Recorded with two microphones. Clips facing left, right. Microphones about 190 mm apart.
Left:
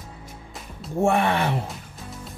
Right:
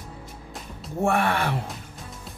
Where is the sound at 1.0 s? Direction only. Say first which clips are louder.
Left 2 dB; 20° left (ahead or behind).